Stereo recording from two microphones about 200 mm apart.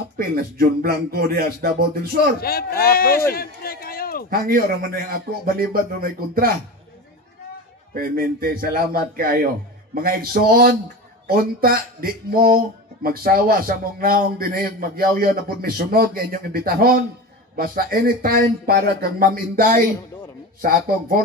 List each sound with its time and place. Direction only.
0.3 s speech: 50° right (ahead or behind)
2.4 s speech: 50° left (ahead or behind)
3.3 s a sound: 50° left (ahead or behind)
4.3 s speech: 45° right (ahead or behind)
7.9 s speech: 50° right (ahead or behind)